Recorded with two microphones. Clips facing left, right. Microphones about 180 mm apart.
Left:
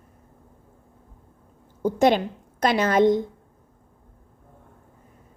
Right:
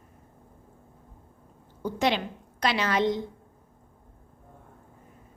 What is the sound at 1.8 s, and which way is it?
A woman's voice, 45° left (ahead or behind).